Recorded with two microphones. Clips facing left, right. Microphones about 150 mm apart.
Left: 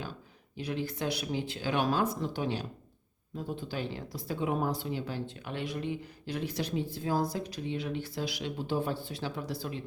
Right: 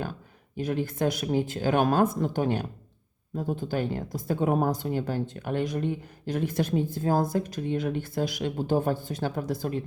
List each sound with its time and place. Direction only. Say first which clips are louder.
0.5 s speech: right 6 dB; 50° right (ahead or behind)